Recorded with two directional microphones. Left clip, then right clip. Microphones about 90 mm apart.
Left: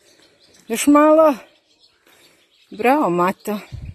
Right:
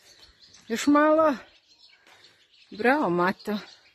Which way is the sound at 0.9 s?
25° left (ahead or behind).